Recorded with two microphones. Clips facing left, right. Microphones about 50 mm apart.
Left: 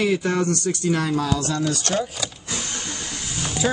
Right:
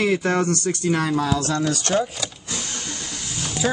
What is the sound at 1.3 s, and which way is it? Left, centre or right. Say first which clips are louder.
Speech: right 2 dB; right.